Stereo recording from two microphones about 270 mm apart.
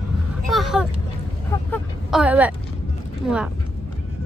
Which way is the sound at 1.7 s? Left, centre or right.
Centre.